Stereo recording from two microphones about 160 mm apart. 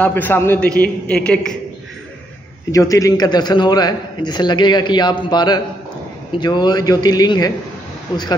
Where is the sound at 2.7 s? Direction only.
20° left (ahead or behind).